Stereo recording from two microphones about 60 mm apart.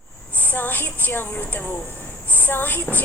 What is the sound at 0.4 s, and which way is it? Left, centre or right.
A woman's voice, left.